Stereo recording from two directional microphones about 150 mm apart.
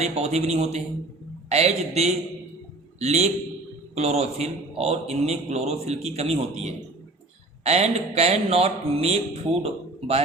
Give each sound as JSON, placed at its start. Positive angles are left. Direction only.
{"t": 0.0, "sound": "a man's voice", "side_deg": -45}